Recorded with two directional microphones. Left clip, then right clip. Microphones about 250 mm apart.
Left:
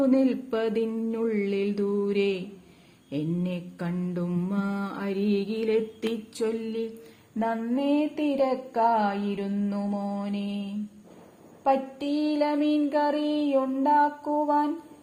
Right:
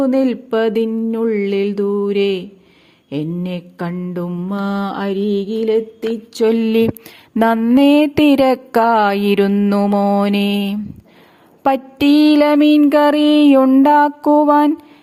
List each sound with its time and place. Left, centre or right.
0.0 s speech: right